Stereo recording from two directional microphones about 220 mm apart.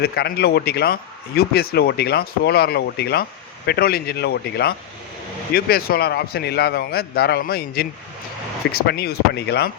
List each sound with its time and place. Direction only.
0.0 s a man's voice: 45° left (ahead or behind)